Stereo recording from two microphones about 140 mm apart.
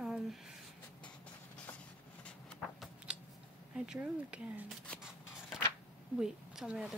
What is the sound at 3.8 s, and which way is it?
Speech, 5° right (ahead or behind).